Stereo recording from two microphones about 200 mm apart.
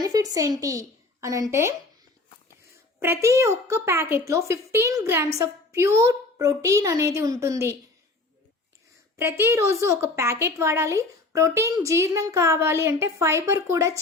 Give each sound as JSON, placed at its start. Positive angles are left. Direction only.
{"t": 0.0, "sound": "a woman's voice", "side_deg": -20}
{"t": 3.0, "sound": "a woman's voice", "side_deg": -15}
{"t": 9.1, "sound": "a woman's voice", "side_deg": -10}